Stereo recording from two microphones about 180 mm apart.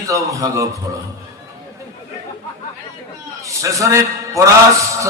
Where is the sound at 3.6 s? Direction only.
20° right (ahead or behind).